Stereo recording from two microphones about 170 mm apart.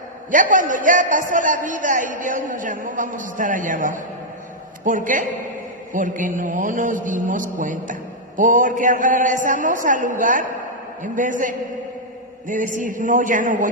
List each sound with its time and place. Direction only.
0.3 s a man's voice: 50° right (ahead or behind)